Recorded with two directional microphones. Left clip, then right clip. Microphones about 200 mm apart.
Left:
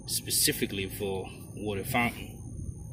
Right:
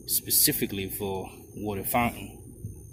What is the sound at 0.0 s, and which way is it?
Speech, 20° right (ahead or behind).